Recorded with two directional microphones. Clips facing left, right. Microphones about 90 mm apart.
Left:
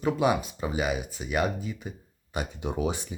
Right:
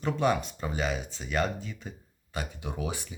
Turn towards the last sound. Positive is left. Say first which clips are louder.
# left 6 dB
turn(degrees=20)  # may be behind; listen again after turning